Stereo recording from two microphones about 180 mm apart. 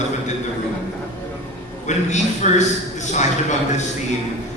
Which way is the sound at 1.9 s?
40° left (ahead or behind).